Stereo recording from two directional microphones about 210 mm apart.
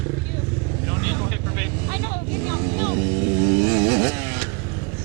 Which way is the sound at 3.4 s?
15° right (ahead or behind).